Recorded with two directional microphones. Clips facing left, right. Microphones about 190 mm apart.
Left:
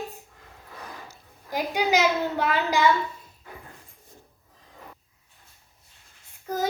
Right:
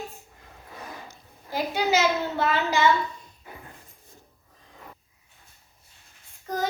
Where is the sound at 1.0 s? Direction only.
15° left (ahead or behind).